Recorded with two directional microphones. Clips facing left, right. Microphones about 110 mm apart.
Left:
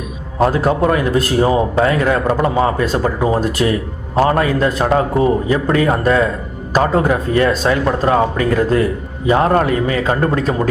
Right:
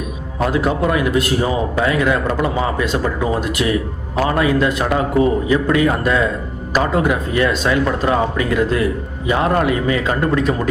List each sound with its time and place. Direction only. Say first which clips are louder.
0.3 s speech: left 3 dB; 35° left (ahead or behind)